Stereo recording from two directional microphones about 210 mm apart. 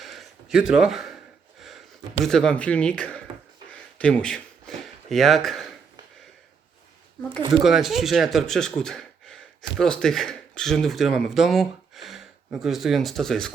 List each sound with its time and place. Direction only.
0.0 s gasp: centre (ahead or behind)
2.2 s speech: 5° left (ahead or behind)
3.7 s a sound: 5° left (ahead or behind)
7.6 s speech: centre (ahead or behind)